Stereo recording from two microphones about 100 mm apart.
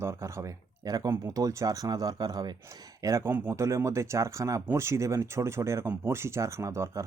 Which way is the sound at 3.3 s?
20° right (ahead or behind).